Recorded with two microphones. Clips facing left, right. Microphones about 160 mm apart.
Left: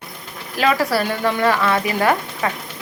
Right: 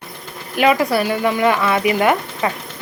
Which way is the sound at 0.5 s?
15° right (ahead or behind).